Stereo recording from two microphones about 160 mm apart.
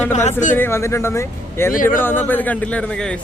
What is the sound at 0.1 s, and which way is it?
Speech, 45° left (ahead or behind).